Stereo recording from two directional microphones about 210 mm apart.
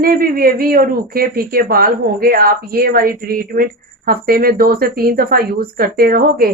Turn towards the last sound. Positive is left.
turn(degrees=-45)  # may be behind; listen again after turning